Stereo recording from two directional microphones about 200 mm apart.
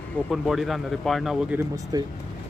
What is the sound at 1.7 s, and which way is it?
Speech, 20° right (ahead or behind).